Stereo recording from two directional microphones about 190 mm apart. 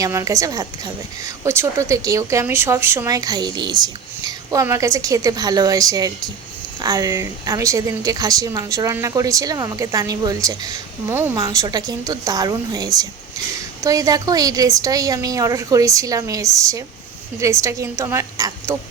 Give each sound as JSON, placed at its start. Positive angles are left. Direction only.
{"t": 0.0, "sound": "a woman's voice", "side_deg": -15}